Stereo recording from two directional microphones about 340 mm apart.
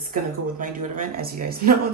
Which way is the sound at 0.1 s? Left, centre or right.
Right.